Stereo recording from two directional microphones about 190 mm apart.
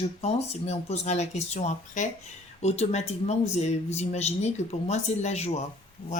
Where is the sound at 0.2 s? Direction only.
35° left (ahead or behind).